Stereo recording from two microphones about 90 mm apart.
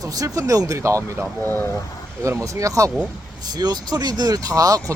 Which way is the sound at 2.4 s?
35° right (ahead or behind).